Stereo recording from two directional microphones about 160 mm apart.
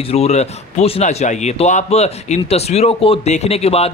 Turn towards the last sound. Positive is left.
turn(degrees=40)  # may be behind; listen again after turning